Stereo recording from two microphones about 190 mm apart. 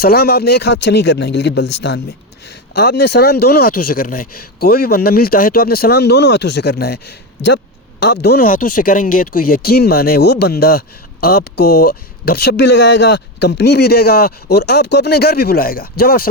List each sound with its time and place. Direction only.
0.0 s speech: 55° left (ahead or behind)